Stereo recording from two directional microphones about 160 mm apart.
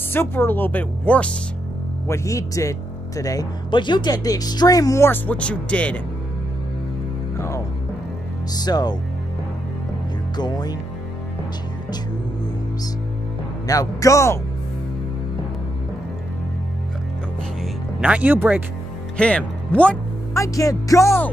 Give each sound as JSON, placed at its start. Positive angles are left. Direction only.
{"t": 0.1, "sound": "speech", "side_deg": 15}
{"t": 2.0, "sound": "speech", "side_deg": 20}
{"t": 7.3, "sound": "music", "side_deg": 15}
{"t": 8.6, "sound": "speech", "side_deg": 25}
{"t": 10.3, "sound": "speech", "side_deg": 25}
{"t": 13.7, "sound": "speech", "side_deg": 20}
{"t": 18.0, "sound": "speech", "side_deg": -10}
{"t": 19.1, "sound": "speech", "side_deg": 5}
{"t": 20.3, "sound": "speech", "side_deg": 20}